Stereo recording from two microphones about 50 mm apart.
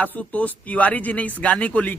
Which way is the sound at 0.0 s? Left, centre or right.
Left.